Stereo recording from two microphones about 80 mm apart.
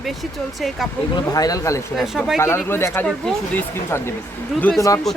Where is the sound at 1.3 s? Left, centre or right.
Left.